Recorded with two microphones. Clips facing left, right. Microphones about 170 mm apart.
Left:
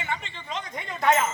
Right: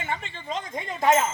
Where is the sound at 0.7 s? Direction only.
25° right (ahead or behind).